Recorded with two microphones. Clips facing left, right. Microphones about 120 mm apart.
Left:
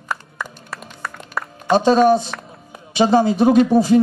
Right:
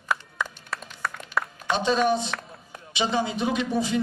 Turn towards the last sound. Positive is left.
turn(degrees=40)  # may be behind; listen again after turning